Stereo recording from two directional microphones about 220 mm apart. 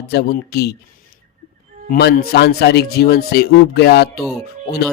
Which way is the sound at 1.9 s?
45° left (ahead or behind).